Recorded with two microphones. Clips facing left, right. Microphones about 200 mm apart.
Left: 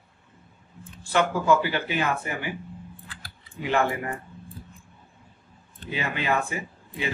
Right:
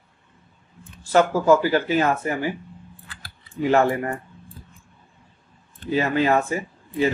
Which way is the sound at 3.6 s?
40° right (ahead or behind).